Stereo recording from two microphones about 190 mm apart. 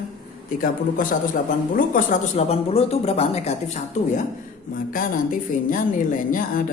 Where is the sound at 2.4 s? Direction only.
30° left (ahead or behind).